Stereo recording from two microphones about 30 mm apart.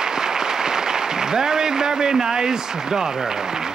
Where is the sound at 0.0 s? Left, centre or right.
Right.